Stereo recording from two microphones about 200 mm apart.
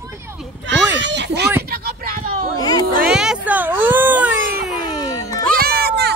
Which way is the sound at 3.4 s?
10° right (ahead or behind).